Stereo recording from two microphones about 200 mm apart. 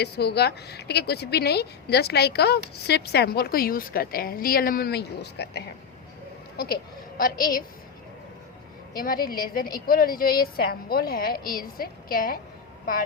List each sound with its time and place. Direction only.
0.0 s a woman's voice: 55° left (ahead or behind)
9.0 s a woman's voice: 45° left (ahead or behind)